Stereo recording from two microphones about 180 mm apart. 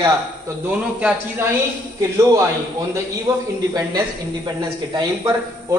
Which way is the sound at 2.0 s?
20° right (ahead or behind).